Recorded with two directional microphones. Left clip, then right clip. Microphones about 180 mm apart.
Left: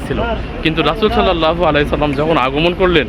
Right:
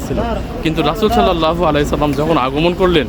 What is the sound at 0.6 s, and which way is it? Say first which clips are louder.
A man's voice: left 1 dB; 15° right (ahead or behind).